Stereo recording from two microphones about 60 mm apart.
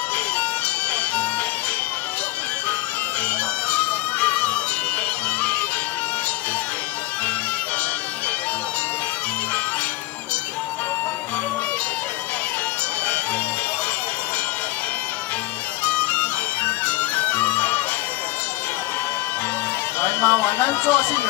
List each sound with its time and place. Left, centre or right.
3.7 s music: left
15.8 s music: left
20.0 s a sound: left